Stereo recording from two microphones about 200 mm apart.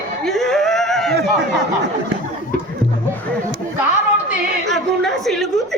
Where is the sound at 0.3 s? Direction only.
Centre (ahead or behind).